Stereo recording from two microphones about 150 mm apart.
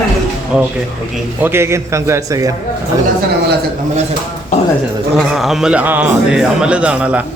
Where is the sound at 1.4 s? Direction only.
15° right (ahead or behind).